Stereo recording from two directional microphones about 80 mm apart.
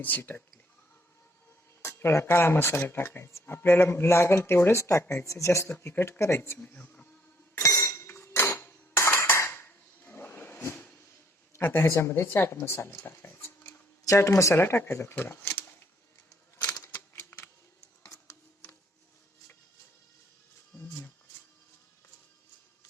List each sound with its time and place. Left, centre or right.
0.0 s speech: left
1.8 s speech: left
6.6 s speech: centre
7.6 s dishes: left
11.5 s speech: left
17.2 s a sound: left
18.1 s printer: left
20.7 s a sound: left